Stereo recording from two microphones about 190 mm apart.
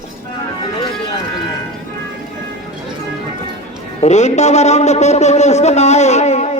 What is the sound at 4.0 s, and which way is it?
Speech, 35° left (ahead or behind).